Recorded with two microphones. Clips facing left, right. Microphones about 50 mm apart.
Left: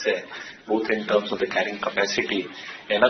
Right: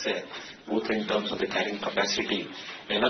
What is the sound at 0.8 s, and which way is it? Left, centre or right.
Speech, left.